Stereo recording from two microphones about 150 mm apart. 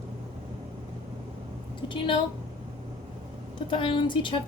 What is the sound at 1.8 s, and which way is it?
Speech, 35° left (ahead or behind).